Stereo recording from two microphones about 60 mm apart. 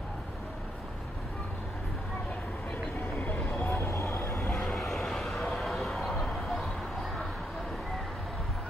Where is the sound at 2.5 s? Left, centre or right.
Centre.